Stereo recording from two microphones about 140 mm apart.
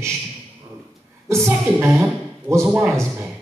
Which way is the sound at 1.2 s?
20° right (ahead or behind).